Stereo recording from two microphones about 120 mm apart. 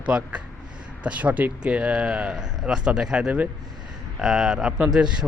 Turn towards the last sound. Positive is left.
turn(degrees=-5)  # may be behind; listen again after turning